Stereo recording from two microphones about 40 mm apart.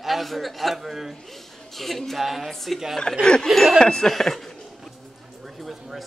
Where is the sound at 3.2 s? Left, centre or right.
Left.